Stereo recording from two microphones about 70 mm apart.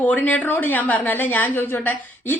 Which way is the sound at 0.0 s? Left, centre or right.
Left.